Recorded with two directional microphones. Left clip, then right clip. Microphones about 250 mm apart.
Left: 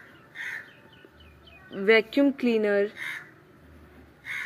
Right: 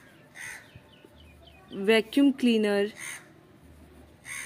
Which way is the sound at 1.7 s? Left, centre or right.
Centre.